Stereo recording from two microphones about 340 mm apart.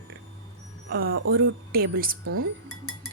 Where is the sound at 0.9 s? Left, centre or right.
Right.